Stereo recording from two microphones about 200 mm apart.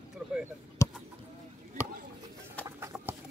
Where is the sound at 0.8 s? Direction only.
15° left (ahead or behind).